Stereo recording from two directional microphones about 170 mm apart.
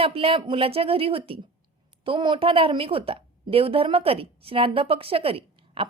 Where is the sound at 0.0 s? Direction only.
35° right (ahead or behind).